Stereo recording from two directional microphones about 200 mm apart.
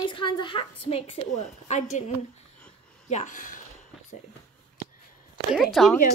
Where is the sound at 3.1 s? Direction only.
35° left (ahead or behind).